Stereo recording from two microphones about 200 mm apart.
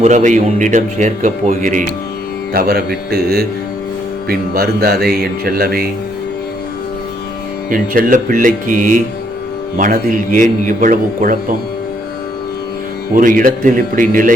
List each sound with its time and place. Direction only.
0.0 s speech: 40° right (ahead or behind)
2.5 s speech: 50° right (ahead or behind)
7.7 s speech: 45° right (ahead or behind)
13.1 s speech: 40° right (ahead or behind)